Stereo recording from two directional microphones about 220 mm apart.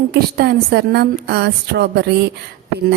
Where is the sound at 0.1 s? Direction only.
50° right (ahead or behind).